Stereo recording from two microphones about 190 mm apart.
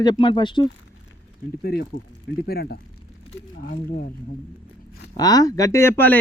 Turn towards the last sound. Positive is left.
turn(degrees=10)  # may be behind; listen again after turning